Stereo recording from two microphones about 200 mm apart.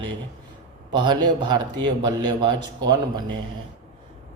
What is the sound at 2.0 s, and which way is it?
Speech, 20° right (ahead or behind).